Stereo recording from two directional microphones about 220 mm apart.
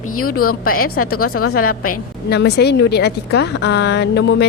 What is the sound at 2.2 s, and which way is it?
Speech, 50° left (ahead or behind).